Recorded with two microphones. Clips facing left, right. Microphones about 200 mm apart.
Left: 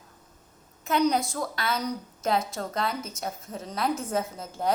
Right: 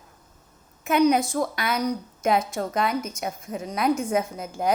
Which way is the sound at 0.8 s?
20° right (ahead or behind).